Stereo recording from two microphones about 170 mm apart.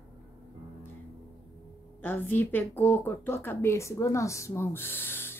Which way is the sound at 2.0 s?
10° left (ahead or behind).